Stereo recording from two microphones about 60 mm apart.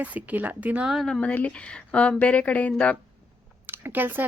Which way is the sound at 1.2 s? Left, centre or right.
Left.